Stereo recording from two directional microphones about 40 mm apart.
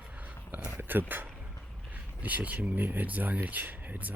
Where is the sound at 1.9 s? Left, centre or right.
Right.